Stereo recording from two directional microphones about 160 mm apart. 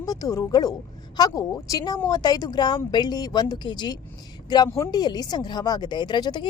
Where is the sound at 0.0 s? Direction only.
25° left (ahead or behind).